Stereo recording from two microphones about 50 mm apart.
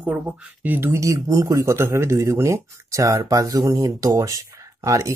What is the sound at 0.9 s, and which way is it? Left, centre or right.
Speech, right.